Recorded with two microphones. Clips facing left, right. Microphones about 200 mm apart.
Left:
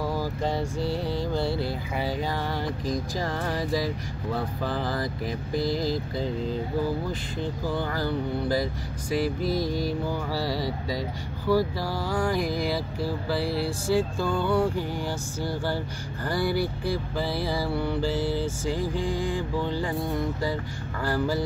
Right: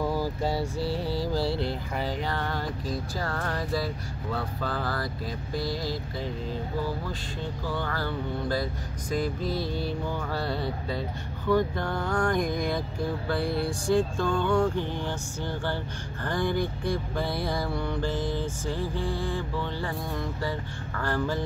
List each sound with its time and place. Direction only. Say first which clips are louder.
0.0 s mantra: even; 15° right (ahead or behind); by 5.6 s 15° left (ahead or behind)
7.8 s mantra: left 3 dB; 10° left (ahead or behind)
21.0 s mantra: left 2 dB; 10° left (ahead or behind)